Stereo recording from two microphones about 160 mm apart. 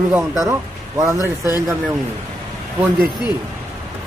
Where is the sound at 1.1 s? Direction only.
20° left (ahead or behind).